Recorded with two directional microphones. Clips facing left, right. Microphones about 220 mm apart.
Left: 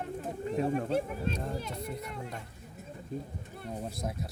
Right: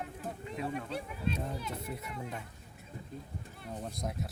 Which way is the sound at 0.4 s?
45° left (ahead or behind).